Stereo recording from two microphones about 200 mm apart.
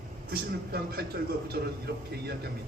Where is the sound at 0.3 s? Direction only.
50° right (ahead or behind).